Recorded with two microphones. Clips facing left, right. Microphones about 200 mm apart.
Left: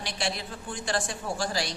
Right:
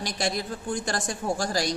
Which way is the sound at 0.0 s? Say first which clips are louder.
Right 4 dB; 40° right (ahead or behind).